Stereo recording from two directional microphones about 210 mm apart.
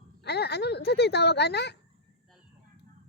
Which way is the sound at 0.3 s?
50° left (ahead or behind).